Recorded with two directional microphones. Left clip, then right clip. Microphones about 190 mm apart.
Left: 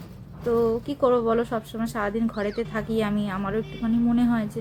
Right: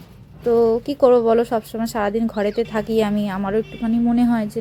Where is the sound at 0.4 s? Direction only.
30° right (ahead or behind).